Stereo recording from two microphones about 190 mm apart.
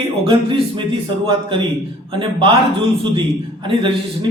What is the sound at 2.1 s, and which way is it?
A man's voice, 25° right (ahead or behind).